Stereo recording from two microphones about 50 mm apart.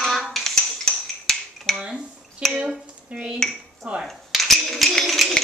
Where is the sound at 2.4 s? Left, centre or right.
Centre.